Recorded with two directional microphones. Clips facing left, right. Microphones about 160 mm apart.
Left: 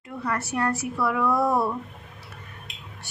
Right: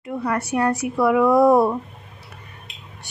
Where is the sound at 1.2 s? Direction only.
35° right (ahead or behind).